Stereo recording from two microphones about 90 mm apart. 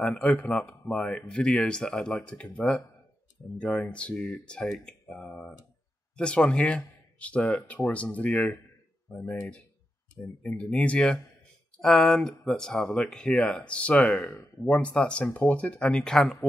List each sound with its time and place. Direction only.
0.0 s speech: 15° left (ahead or behind)
14.2 s speech: 35° left (ahead or behind)
14.6 s speech: 15° left (ahead or behind)